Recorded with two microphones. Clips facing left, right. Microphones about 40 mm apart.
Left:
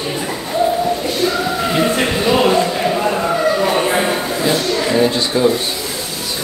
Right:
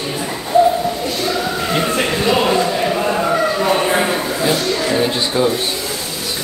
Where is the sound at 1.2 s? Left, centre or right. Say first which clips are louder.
Left 1 dB; centre.